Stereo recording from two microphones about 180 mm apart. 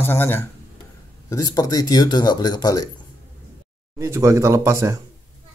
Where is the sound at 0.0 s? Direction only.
10° left (ahead or behind).